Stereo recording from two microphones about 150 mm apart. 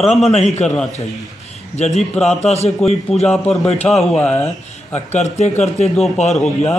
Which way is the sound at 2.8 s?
Centre (ahead or behind).